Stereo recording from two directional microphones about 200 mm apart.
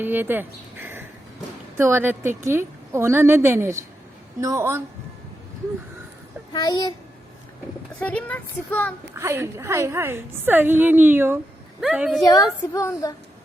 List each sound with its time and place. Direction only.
0.0 s a woman's voice: 10° right (ahead or behind)
6.5 s a child's voice: 20° left (ahead or behind)
7.9 s speech: 5° left (ahead or behind)
9.1 s a woman's voice: 10° right (ahead or behind)
12.7 s speech: 15° left (ahead or behind)